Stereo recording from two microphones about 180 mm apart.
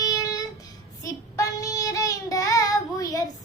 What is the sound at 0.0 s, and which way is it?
Child singing, 20° left (ahead or behind).